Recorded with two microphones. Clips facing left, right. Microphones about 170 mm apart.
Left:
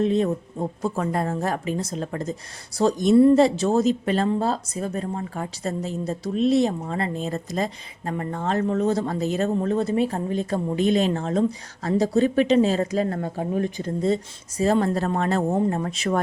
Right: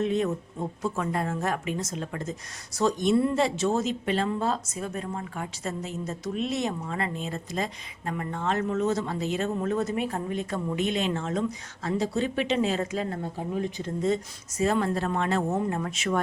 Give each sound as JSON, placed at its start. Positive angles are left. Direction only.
{"t": 0.0, "sound": "speech", "side_deg": 35}